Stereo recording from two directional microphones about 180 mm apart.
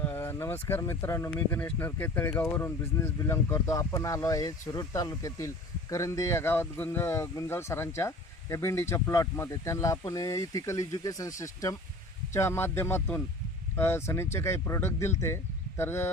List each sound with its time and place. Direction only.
0.0 s speech: 10° left (ahead or behind)